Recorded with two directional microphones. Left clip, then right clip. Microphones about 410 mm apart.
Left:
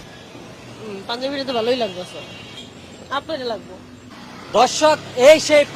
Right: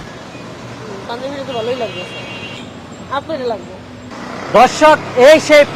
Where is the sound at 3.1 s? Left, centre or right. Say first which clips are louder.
Right 5 dB; left.